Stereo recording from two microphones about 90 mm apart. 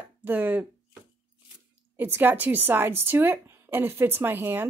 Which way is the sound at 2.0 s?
20° right (ahead or behind).